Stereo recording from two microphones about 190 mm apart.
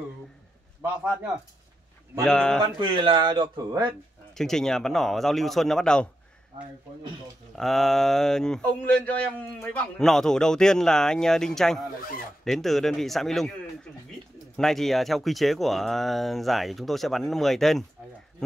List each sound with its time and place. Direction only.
2.2 s speech: 5° left (ahead or behind)
2.6 s speech: 25° right (ahead or behind)
4.4 s speech: 5° left (ahead or behind)
7.5 s speech: centre (ahead or behind)
14.6 s speech: centre (ahead or behind)